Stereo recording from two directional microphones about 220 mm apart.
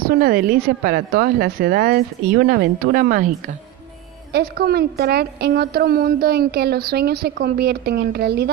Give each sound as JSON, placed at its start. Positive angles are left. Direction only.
{"t": 0.0, "sound": "a woman's voice", "side_deg": -40}